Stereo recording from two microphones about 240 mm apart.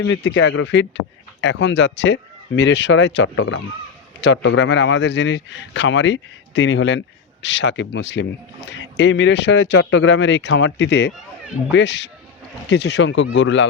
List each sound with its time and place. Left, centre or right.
0.0 s speech: left